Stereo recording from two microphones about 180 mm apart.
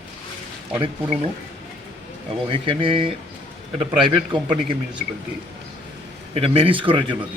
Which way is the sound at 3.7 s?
Centre (ahead or behind).